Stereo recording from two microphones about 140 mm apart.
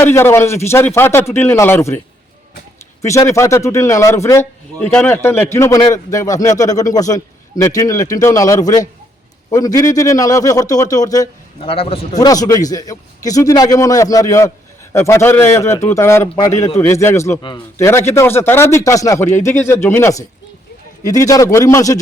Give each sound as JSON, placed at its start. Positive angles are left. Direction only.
{"t": 0.0, "sound": "a man's voice", "side_deg": 15}
{"t": 3.0, "sound": "a man's voice", "side_deg": 20}
{"t": 11.6, "sound": "a man's voice", "side_deg": 40}
{"t": 12.1, "sound": "a man's voice", "side_deg": 25}